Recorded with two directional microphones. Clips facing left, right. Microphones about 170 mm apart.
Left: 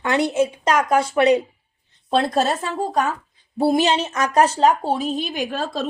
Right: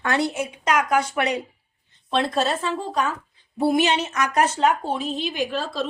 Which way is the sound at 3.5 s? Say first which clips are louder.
Left 2 dB; 30° left (ahead or behind).